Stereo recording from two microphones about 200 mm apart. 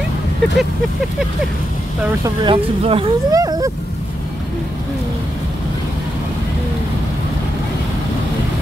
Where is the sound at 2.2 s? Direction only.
25° right (ahead or behind).